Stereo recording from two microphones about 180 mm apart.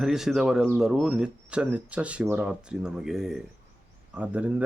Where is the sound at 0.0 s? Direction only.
Centre (ahead or behind).